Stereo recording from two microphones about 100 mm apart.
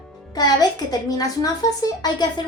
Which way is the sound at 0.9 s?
40° left (ahead or behind).